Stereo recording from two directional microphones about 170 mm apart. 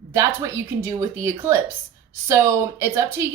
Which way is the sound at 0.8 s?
15° right (ahead or behind).